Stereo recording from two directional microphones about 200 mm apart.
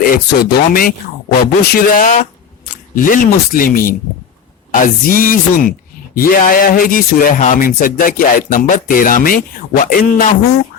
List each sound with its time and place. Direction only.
0.0 s speech: 45° left (ahead or behind)